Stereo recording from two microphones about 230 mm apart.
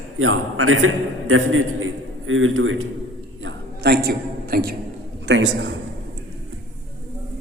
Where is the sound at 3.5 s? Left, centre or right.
Right.